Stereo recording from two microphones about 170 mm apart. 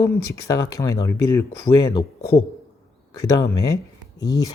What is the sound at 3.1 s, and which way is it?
Speech, 20° left (ahead or behind).